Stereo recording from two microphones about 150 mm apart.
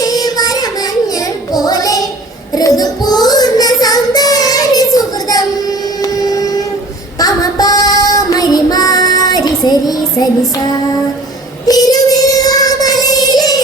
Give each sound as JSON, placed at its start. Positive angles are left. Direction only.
{"t": 0.0, "sound": "a sound", "side_deg": 25}
{"t": 1.5, "sound": "child singing", "side_deg": 25}
{"t": 6.0, "sound": "train", "side_deg": 25}
{"t": 7.2, "sound": "child singing", "side_deg": 25}
{"t": 11.6, "sound": "child singing", "side_deg": 25}